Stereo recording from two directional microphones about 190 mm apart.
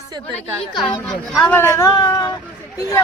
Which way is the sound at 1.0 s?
5° left (ahead or behind).